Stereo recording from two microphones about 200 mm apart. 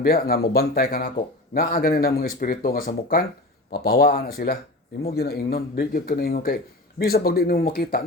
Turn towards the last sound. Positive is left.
turn(degrees=45)  # may be behind; listen again after turning